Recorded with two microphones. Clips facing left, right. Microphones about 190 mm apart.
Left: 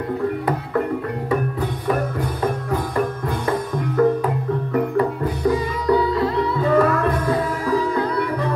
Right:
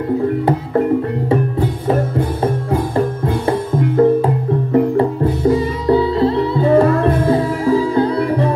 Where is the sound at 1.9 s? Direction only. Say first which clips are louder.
Right 4 dB; 30° right (ahead or behind).